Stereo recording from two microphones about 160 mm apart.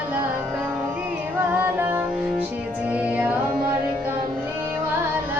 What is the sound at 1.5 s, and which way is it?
Music, 10° right (ahead or behind).